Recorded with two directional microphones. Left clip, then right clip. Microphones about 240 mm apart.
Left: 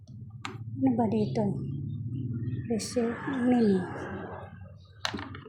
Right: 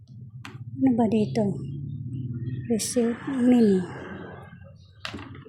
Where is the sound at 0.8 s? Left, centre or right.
Right.